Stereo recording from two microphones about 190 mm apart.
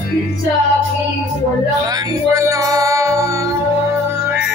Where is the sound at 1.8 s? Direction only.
20° right (ahead or behind).